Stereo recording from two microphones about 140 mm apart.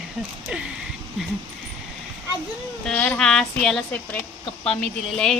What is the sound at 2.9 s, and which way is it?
A woman's voice, 5° left (ahead or behind).